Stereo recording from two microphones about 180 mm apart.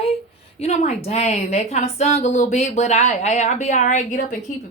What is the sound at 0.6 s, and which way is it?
A woman's voice, 35° left (ahead or behind).